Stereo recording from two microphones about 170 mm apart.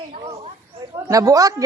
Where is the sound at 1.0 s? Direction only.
20° right (ahead or behind).